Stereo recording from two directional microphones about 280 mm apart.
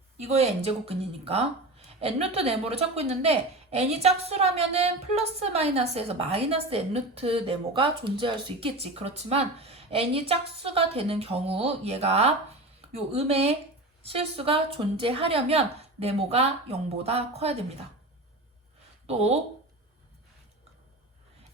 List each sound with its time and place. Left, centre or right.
0.2 s a woman's voice: right